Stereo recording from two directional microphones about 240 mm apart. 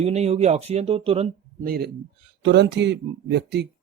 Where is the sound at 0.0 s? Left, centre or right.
Right.